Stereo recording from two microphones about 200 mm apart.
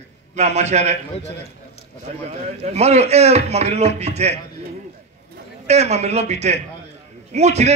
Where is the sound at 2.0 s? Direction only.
35° right (ahead or behind).